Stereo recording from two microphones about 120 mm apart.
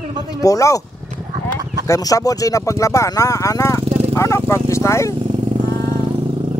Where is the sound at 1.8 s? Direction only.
25° left (ahead or behind).